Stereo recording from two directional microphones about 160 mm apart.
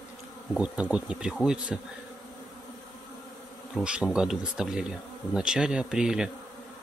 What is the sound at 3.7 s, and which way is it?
Speech, 5° right (ahead or behind).